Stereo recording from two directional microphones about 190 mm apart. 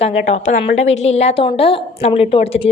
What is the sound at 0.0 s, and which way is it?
A woman's voice, 35° left (ahead or behind).